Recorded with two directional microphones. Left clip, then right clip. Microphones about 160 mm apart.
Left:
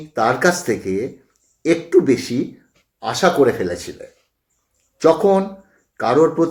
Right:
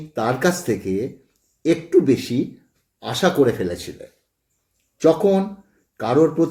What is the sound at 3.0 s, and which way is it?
Speech, 20° right (ahead or behind).